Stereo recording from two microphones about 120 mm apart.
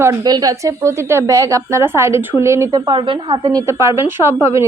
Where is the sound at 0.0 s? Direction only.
30° right (ahead or behind).